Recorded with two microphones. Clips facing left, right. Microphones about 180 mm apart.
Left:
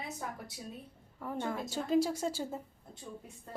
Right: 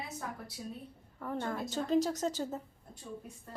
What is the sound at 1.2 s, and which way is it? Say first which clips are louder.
A woman's voice: even; 10° left (ahead or behind).